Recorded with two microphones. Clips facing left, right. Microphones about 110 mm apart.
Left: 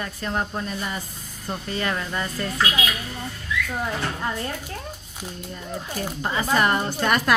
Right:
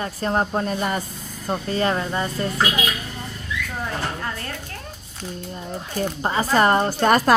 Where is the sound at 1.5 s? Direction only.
35° right (ahead or behind).